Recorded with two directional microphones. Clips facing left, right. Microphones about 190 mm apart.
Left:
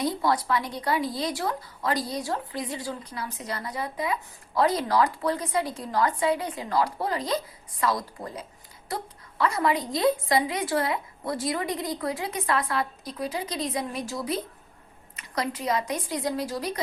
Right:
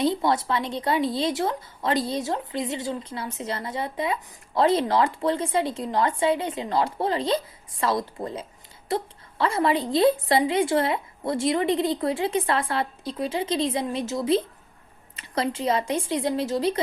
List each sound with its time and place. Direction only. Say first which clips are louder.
0.0 s a woman's voice: right 3 dB; 25° right (ahead or behind)